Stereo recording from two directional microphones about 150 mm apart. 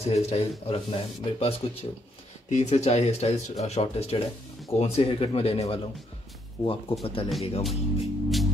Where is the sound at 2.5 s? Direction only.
50° left (ahead or behind).